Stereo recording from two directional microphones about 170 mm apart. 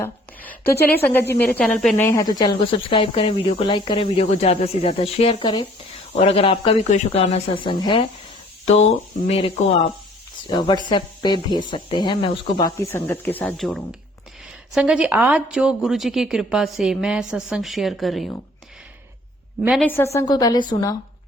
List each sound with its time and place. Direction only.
0.0 s a woman's voice: 10° left (ahead or behind)
2.0 s speech: 20° left (ahead or behind)
9.3 s speech: 35° left (ahead or behind)
10.5 s a woman's voice: 25° left (ahead or behind); by 18.3 s centre (ahead or behind)
19.8 s a woman's voice: 10° left (ahead or behind)
20.1 s speech: 25° left (ahead or behind)